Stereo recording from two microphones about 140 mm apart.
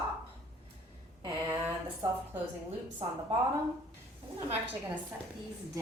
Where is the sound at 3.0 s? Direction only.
50° right (ahead or behind).